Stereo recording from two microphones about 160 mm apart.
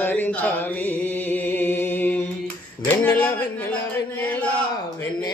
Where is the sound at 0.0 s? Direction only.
10° left (ahead or behind).